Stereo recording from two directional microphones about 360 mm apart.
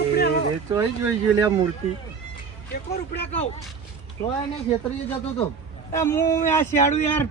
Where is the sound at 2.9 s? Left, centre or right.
Centre.